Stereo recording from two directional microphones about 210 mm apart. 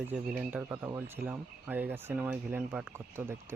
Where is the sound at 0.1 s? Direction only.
Centre (ahead or behind).